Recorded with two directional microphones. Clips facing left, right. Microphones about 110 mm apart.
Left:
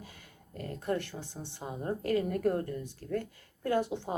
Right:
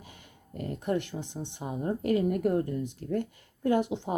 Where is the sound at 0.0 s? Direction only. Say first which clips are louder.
Even; 20° right (ahead or behind).